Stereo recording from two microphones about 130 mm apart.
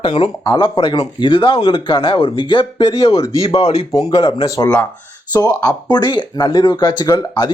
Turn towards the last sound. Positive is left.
turn(degrees=35)  # may be behind; listen again after turning